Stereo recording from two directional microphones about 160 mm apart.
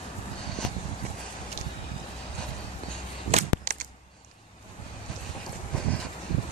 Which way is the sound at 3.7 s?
50° right (ahead or behind).